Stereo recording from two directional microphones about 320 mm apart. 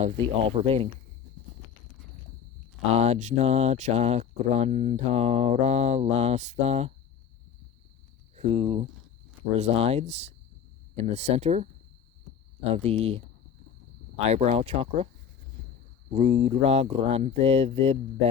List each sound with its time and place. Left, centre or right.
0.0 s speech: centre
2.9 s speech: centre
8.4 s speech: centre
14.3 s speech: right
16.0 s speech: centre